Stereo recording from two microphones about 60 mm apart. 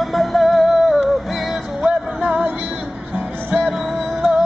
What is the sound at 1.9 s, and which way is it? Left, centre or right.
Music, right.